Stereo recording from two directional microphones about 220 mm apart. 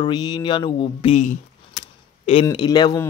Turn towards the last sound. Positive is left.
turn(degrees=20)  # may be behind; listen again after turning